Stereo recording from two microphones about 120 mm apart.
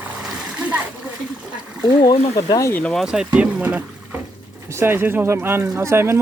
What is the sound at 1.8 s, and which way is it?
Speech, 35° left (ahead or behind).